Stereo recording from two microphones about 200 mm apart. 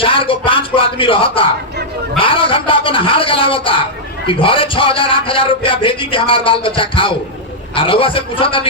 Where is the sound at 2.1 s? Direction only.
25° left (ahead or behind).